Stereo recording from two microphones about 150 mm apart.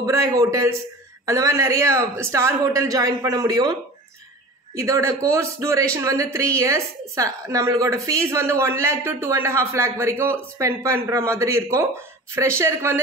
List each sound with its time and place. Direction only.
0.0 s a man's voice: 20° right (ahead or behind)
4.7 s a man's voice: 20° right (ahead or behind)